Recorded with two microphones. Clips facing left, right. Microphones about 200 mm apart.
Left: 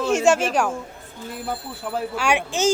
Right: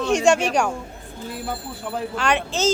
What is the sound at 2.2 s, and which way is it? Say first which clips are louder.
Speech: even; 10° left (ahead or behind).